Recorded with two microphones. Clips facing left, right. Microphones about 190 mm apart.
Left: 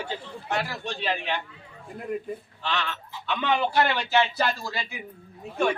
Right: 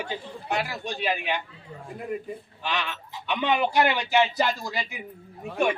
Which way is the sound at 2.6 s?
15° right (ahead or behind).